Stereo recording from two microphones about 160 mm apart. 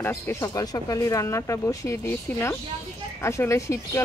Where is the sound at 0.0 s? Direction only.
20° left (ahead or behind).